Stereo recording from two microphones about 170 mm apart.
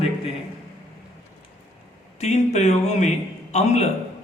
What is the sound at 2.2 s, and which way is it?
A man's voice, 40° left (ahead or behind).